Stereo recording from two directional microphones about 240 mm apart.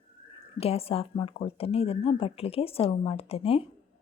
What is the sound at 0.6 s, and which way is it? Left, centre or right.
Speech, left.